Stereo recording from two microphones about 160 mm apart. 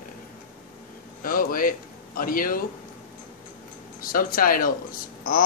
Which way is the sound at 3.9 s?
65° left (ahead or behind).